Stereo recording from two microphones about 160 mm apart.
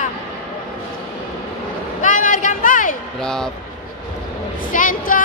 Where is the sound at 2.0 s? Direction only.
55° left (ahead or behind).